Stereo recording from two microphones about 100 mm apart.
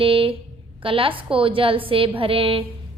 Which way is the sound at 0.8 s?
65° right (ahead or behind).